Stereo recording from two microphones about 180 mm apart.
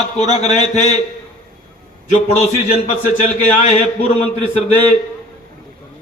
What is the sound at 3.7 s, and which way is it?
A man's voice, 35° left (ahead or behind).